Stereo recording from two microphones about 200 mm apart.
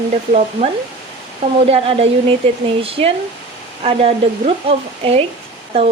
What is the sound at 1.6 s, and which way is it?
Speech, 30° right (ahead or behind).